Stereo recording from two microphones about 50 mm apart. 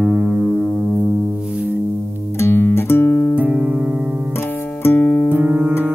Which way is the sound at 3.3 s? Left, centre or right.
Right.